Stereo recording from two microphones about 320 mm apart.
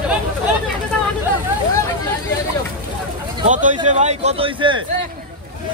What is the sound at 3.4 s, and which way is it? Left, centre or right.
Speech, right.